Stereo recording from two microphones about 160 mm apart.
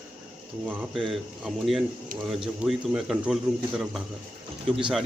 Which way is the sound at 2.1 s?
55° right (ahead or behind).